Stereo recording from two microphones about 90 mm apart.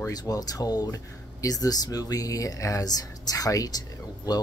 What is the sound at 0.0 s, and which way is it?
Speech, 45° left (ahead or behind).